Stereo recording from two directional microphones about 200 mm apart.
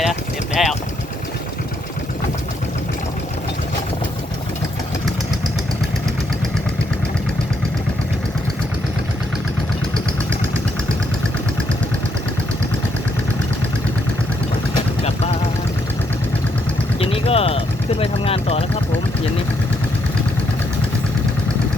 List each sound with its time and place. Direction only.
0.0 s vehicle: centre (ahead or behind)
15.0 s vehicle: 30° left (ahead or behind)
17.0 s vehicle: 30° left (ahead or behind)